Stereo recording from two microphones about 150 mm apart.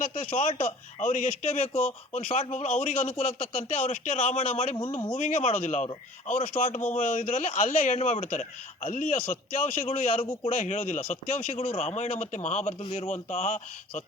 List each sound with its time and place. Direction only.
0.1 s a man's voice: 45° left (ahead or behind)
6.9 s a man's voice: 60° left (ahead or behind)
11.5 s a man's voice: 45° left (ahead or behind)